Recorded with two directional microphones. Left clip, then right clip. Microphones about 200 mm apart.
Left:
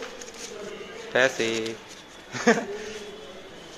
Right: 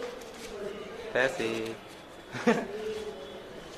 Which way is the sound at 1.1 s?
35° left (ahead or behind).